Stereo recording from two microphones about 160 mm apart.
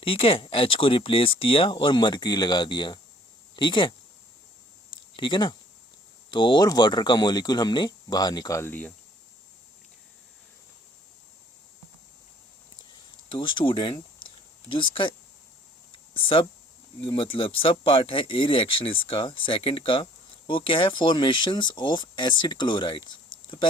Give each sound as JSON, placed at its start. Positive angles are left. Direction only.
{"t": 0.0, "sound": "speech", "side_deg": 35}
{"t": 5.1, "sound": "speech", "side_deg": 30}
{"t": 13.3, "sound": "speech", "side_deg": 30}
{"t": 15.9, "sound": "a sound", "side_deg": 35}
{"t": 17.0, "sound": "speech", "side_deg": 35}